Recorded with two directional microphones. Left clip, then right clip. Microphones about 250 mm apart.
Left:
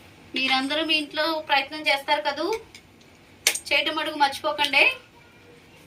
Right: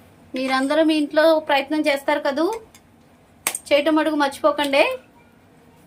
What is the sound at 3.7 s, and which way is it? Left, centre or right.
Speech, right.